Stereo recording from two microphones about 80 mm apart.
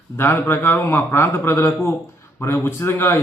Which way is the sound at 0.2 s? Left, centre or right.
Left.